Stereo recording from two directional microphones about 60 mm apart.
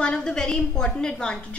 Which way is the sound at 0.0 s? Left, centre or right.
Centre.